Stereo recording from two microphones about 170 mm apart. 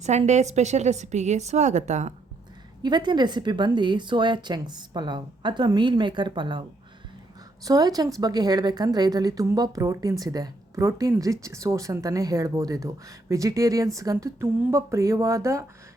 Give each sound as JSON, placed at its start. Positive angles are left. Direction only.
{"t": 0.0, "sound": "a woman's voice", "side_deg": -40}
{"t": 2.8, "sound": "a woman's voice", "side_deg": -25}